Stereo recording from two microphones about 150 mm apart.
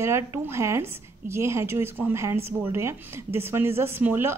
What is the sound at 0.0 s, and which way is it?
Speech, 20° right (ahead or behind).